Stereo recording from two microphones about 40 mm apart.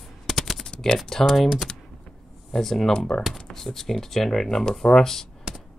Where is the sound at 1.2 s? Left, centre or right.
Centre.